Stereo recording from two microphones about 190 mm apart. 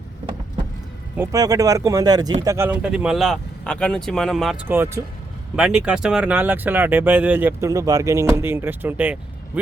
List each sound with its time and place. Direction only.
1.1 s speech: 15° right (ahead or behind)
4.7 s speech: 10° right (ahead or behind)